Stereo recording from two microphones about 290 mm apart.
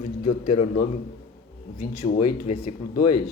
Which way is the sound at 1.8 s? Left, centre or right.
Left.